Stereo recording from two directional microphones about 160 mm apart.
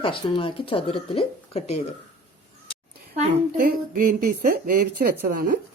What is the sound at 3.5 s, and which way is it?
A woman's voice, 60° right (ahead or behind).